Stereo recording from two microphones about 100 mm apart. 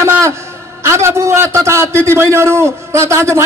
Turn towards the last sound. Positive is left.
turn(degrees=-25)  # may be behind; listen again after turning